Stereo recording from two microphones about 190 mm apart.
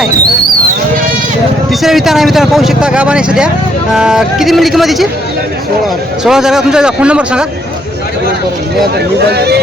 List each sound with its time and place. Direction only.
1.8 s speech: centre (ahead or behind)
6.2 s speech: 5° right (ahead or behind)
9.3 s speech: 60° right (ahead or behind)